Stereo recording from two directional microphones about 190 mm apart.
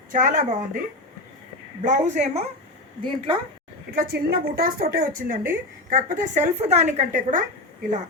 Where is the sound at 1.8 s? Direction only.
40° right (ahead or behind).